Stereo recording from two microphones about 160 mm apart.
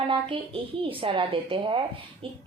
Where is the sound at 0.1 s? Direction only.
35° right (ahead or behind).